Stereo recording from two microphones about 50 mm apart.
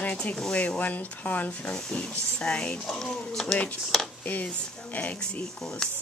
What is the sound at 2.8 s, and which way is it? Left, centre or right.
Speech, centre.